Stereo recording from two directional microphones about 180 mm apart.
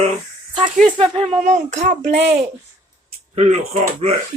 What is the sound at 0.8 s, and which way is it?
Speech, 30° right (ahead or behind).